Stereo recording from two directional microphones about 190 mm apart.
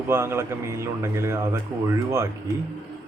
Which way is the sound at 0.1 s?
15° right (ahead or behind).